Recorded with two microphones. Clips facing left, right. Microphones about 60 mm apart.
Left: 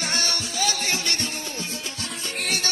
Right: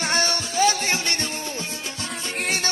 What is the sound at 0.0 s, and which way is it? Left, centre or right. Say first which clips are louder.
Music: right 4 dB; right.